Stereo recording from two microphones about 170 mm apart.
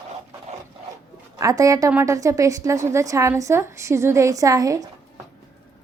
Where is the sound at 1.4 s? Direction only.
20° right (ahead or behind).